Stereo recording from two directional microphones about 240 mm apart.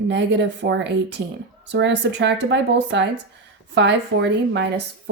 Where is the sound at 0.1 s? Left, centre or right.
Right.